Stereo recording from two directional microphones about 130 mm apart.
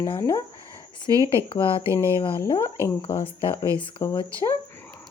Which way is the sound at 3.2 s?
45° left (ahead or behind).